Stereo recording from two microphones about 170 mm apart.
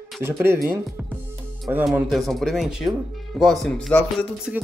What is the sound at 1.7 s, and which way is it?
Speech, 5° right (ahead or behind).